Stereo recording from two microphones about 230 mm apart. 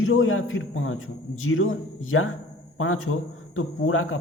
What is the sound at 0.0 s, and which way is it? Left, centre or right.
A man's voice, left.